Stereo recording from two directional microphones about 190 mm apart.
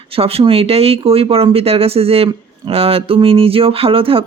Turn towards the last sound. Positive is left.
turn(degrees=-30)  # may be behind; listen again after turning